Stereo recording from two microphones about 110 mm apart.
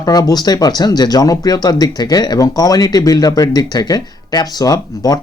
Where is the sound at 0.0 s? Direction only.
35° left (ahead or behind).